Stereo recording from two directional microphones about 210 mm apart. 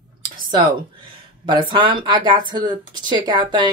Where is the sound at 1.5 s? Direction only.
25° right (ahead or behind).